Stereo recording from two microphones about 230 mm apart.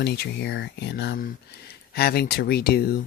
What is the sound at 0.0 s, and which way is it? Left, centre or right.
Speech, left.